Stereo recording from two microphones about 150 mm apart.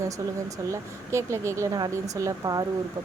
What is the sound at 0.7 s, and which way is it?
Speech, 20° right (ahead or behind).